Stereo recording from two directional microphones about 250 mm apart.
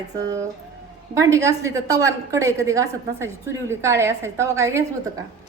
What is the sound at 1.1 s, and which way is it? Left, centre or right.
A woman's voice, centre.